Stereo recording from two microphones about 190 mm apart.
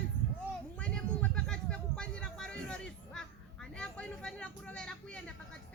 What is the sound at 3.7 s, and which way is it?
Vehicle, 5° left (ahead or behind).